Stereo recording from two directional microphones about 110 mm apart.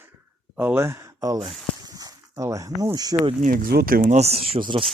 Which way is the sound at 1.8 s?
35° right (ahead or behind).